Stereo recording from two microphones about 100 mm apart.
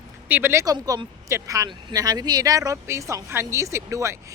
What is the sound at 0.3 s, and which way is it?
Speech, 20° right (ahead or behind).